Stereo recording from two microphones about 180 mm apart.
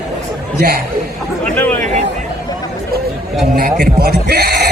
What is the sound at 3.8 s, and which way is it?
Speech, 60° right (ahead or behind).